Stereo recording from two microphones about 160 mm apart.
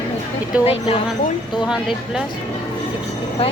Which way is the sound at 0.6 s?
40° left (ahead or behind).